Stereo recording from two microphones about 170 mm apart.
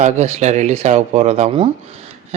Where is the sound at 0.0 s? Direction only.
40° right (ahead or behind).